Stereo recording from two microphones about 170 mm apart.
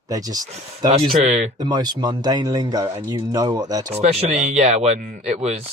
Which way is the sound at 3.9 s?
35° right (ahead or behind).